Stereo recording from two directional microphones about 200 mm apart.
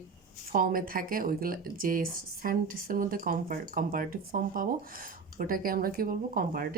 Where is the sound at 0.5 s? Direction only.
45° right (ahead or behind).